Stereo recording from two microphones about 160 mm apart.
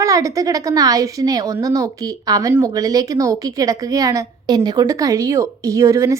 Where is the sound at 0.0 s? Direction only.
20° right (ahead or behind).